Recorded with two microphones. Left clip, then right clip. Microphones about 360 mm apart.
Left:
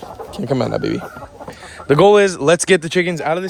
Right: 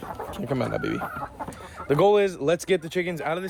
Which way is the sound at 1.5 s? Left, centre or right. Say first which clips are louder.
Left 9 dB; left.